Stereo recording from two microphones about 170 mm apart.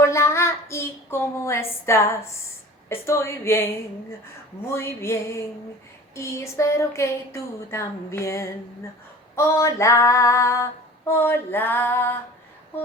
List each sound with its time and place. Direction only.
0.0 s child singing: 15° left (ahead or behind)
2.9 s female singing: 15° left (ahead or behind)